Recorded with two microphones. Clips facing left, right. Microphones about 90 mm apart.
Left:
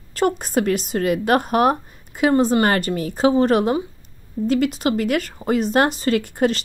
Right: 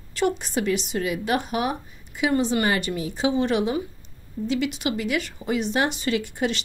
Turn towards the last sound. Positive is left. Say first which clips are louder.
# left 6 dB
turn(degrees=45)  # may be behind; listen again after turning